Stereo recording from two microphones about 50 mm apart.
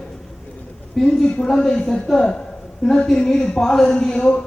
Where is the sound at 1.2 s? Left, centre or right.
Centre.